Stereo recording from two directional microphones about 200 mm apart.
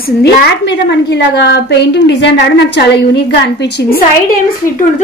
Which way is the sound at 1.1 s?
60° left (ahead or behind).